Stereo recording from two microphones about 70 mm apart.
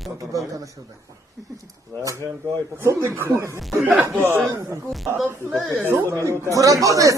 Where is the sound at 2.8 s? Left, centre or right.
Right.